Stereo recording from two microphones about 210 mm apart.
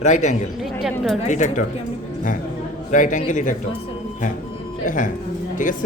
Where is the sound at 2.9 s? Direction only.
35° left (ahead or behind).